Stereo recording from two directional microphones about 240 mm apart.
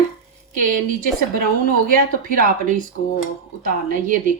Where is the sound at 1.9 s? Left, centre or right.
Right.